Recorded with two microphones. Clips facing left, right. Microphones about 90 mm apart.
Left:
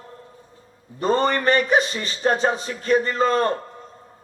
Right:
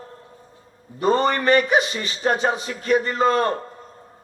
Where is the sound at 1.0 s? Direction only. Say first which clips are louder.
Right 1 dB; 35° left (ahead or behind).